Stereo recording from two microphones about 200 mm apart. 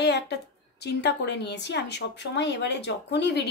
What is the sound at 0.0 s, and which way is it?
A woman's voice, 55° left (ahead or behind).